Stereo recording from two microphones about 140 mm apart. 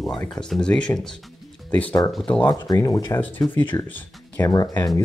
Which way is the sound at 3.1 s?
15° left (ahead or behind).